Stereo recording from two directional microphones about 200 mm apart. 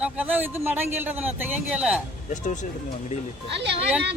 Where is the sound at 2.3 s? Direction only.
40° left (ahead or behind).